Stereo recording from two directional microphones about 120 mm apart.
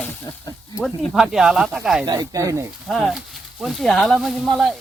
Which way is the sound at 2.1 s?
30° right (ahead or behind).